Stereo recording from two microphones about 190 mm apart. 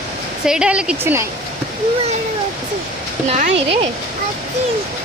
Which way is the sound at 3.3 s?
35° right (ahead or behind).